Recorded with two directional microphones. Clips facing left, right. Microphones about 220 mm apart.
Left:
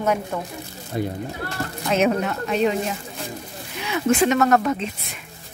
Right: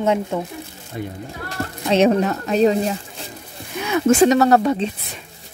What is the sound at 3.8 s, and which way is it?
Speech, 45° right (ahead or behind).